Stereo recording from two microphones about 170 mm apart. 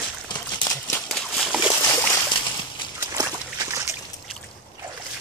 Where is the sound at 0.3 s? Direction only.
15° left (ahead or behind).